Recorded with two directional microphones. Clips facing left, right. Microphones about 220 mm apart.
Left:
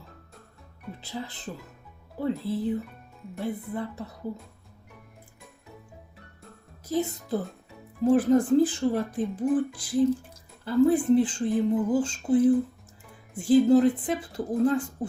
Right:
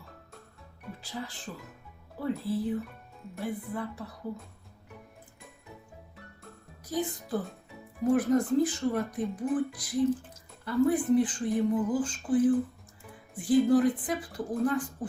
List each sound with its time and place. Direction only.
1.1 s speech: 20° left (ahead or behind)
2.5 s speech: 25° left (ahead or behind)
6.8 s speech: 25° left (ahead or behind)